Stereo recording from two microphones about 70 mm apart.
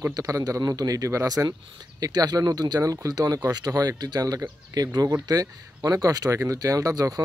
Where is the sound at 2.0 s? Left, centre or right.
Right.